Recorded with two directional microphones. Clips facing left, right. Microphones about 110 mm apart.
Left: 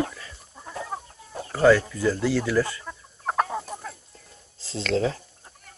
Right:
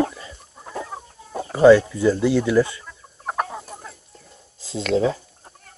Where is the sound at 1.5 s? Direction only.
20° right (ahead or behind).